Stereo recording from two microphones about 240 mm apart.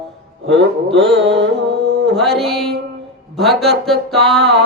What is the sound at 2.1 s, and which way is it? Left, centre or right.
Music, centre.